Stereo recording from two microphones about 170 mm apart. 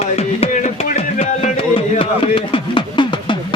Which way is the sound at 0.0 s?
35° left (ahead or behind).